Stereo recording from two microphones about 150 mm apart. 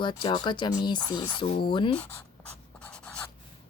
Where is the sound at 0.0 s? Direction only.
30° left (ahead or behind).